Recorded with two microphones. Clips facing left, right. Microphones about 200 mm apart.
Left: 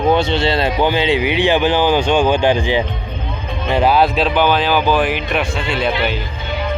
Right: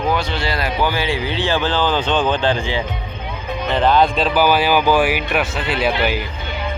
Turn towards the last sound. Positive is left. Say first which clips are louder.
# even
turn(degrees=-5)  # may be behind; listen again after turning